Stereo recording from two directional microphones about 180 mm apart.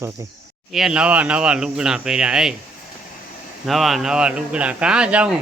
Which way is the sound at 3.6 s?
Centre (ahead or behind).